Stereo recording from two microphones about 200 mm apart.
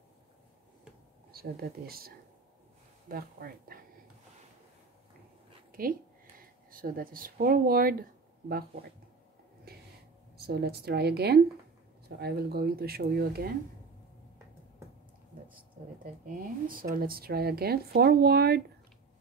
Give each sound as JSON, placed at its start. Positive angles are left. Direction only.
{"t": 1.3, "sound": "speech", "side_deg": -50}
{"t": 5.7, "sound": "a sound", "side_deg": -45}
{"t": 6.7, "sound": "speech", "side_deg": -45}
{"t": 10.3, "sound": "speech", "side_deg": -55}
{"t": 15.5, "sound": "speech", "side_deg": -45}